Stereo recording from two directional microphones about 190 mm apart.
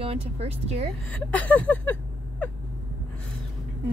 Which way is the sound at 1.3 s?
10° left (ahead or behind).